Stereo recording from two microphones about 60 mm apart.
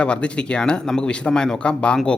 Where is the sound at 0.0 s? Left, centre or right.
Centre.